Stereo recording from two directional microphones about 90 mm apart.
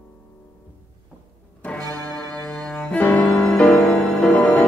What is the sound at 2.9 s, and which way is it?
Music, 15° left (ahead or behind).